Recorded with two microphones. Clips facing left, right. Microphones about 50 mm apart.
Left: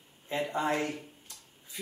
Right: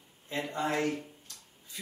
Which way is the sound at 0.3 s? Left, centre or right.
Centre.